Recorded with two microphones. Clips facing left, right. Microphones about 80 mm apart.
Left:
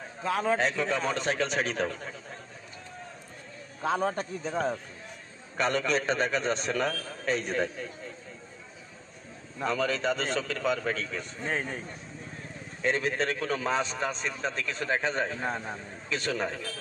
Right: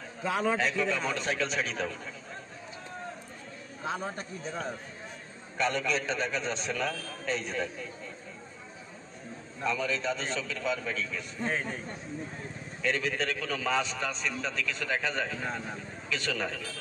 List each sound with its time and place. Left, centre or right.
0.2 s a man's voice: centre
0.6 s a man's voice: left
3.8 s a man's voice: left
9.6 s a man's voice: left
12.8 s a man's voice: left